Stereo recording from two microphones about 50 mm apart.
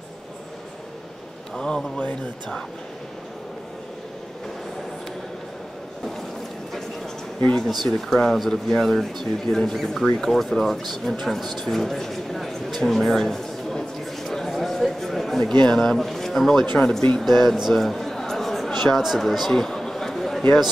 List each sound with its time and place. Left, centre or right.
1.5 s speech: centre
7.6 s speech: centre
17.6 s a sound: centre